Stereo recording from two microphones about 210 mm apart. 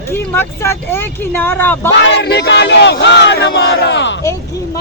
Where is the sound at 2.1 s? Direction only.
50° left (ahead or behind).